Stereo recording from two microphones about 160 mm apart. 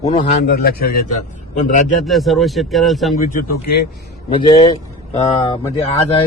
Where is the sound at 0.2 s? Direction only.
75° left (ahead or behind).